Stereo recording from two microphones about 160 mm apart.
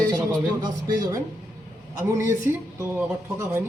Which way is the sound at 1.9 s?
15° right (ahead or behind).